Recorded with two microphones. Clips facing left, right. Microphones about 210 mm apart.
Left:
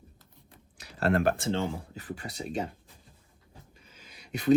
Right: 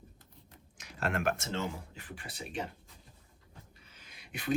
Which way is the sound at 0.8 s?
35° left (ahead or behind).